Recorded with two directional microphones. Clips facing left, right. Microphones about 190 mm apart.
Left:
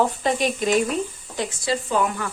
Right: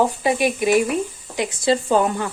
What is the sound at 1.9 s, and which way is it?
Speech, 30° right (ahead or behind).